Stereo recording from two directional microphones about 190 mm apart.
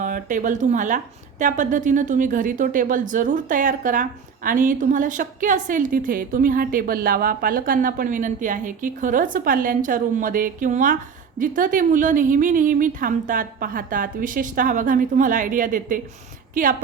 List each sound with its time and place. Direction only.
0.0 s a woman's voice: 45° right (ahead or behind)